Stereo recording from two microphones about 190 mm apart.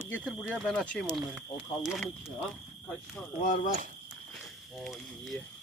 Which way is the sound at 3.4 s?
40° left (ahead or behind).